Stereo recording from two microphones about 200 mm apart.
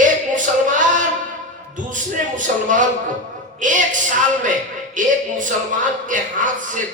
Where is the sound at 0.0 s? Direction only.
40° right (ahead or behind).